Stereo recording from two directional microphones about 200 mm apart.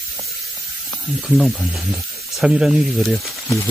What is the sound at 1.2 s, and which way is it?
Speech, centre (ahead or behind).